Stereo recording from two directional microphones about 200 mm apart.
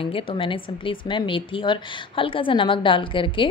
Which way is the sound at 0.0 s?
25° left (ahead or behind).